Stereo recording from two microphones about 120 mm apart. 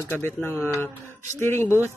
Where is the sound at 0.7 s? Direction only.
20° left (ahead or behind).